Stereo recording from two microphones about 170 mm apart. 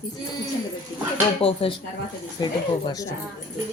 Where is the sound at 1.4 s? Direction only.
35° left (ahead or behind).